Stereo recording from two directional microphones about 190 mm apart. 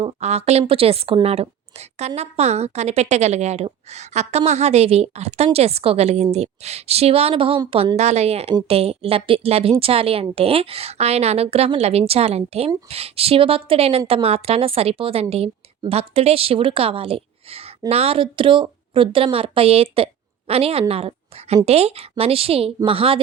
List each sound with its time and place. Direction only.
0.0 s a woman's voice: 35° right (ahead or behind)